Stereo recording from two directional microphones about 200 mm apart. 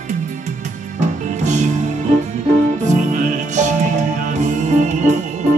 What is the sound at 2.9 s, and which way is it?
Music, 35° right (ahead or behind).